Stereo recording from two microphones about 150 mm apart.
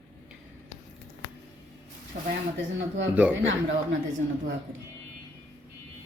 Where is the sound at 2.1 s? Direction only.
75° right (ahead or behind).